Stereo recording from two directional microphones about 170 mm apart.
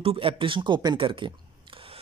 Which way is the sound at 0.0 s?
35° right (ahead or behind).